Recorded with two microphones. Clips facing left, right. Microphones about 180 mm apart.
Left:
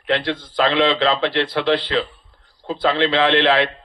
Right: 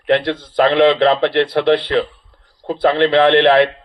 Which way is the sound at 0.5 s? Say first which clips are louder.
Right 6 dB; 55° right (ahead or behind).